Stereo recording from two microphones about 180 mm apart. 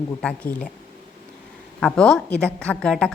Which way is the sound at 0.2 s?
5° left (ahead or behind).